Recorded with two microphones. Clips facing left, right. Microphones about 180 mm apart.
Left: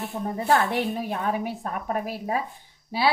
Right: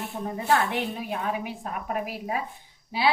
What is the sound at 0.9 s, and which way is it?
Speech, 40° left (ahead or behind).